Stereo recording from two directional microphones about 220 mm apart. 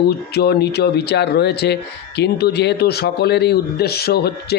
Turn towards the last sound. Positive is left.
turn(degrees=45)  # may be behind; listen again after turning